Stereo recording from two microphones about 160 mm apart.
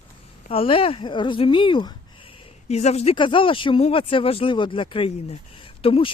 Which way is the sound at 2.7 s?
40° left (ahead or behind).